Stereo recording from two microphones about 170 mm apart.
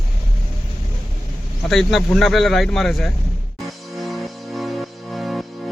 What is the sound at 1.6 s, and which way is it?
Speech, centre (ahead or behind).